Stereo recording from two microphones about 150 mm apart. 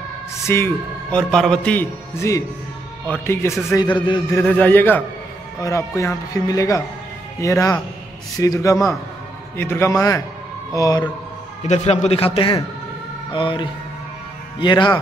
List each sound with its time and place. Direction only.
0.5 s a man's voice: 15° left (ahead or behind)
1.1 s a man's voice: 5° left (ahead or behind)
3.1 s a man's voice: 15° left (ahead or behind)
3.6 s speech: 25° left (ahead or behind)
4.4 s a man's voice: 10° left (ahead or behind)
11.6 s speech: 45° left (ahead or behind); by 15.0 s 30° left (ahead or behind)